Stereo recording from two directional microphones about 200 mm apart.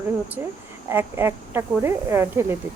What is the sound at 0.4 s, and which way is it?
Speech, 10° right (ahead or behind).